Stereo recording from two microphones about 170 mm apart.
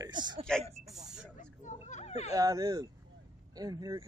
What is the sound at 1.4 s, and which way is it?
Children playing, 45° left (ahead or behind).